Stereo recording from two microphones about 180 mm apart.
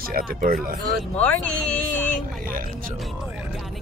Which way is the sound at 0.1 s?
50° right (ahead or behind).